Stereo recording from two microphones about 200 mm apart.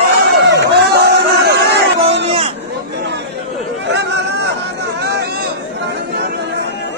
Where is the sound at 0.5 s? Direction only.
55° right (ahead or behind).